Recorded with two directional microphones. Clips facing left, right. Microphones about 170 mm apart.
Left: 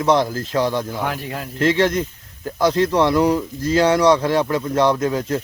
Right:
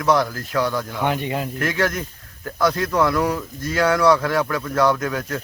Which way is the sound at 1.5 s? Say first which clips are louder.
Left 9 dB; 25° left (ahead or behind).